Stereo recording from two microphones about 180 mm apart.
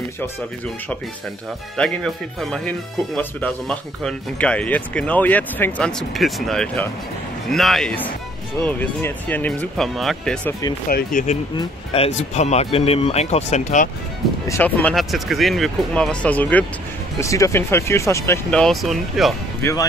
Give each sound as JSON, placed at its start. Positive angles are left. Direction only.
{"t": 1.8, "sound": "speech", "side_deg": 5}
{"t": 10.9, "sound": "speech", "side_deg": 55}
{"t": 11.5, "sound": "speech", "side_deg": 35}
{"t": 14.5, "sound": "speech", "side_deg": 10}
{"t": 19.6, "sound": "speech", "side_deg": 20}